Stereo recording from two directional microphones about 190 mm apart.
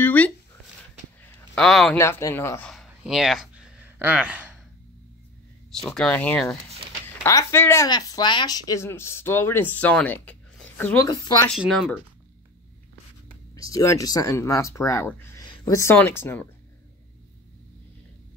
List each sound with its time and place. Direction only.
0.0 s a sound: 10° left (ahead or behind)
1.5 s speech: centre (ahead or behind)
2.0 s speech: 15° left (ahead or behind)
2.7 s a sound: centre (ahead or behind)
5.9 s speech: 5° left (ahead or behind)
13.6 s speech: 20° left (ahead or behind)
15.4 s speech: 20° left (ahead or behind)